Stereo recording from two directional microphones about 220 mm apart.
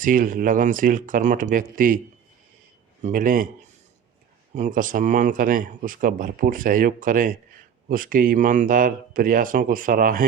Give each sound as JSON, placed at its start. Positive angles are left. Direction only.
{"t": 0.0, "sound": "speech", "side_deg": -40}
{"t": 3.0, "sound": "speech", "side_deg": -35}
{"t": 4.5, "sound": "speech", "side_deg": -35}